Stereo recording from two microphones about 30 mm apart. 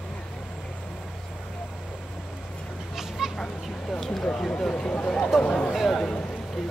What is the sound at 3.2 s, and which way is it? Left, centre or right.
Children playing, centre.